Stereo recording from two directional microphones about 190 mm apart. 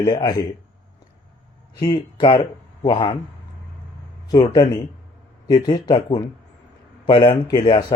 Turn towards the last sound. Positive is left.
turn(degrees=25)  # may be behind; listen again after turning